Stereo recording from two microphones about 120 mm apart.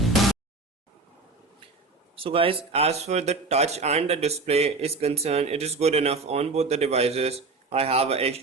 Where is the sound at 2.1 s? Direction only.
50° right (ahead or behind).